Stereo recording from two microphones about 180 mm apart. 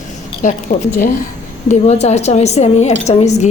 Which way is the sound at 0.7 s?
45° left (ahead or behind).